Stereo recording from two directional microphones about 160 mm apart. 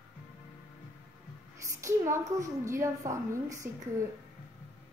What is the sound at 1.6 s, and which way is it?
A woman's voice, 15° right (ahead or behind).